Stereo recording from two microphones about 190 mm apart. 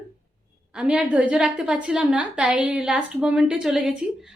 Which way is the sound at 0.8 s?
5° right (ahead or behind).